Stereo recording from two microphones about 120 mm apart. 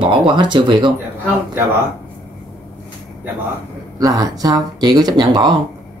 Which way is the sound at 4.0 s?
30° right (ahead or behind).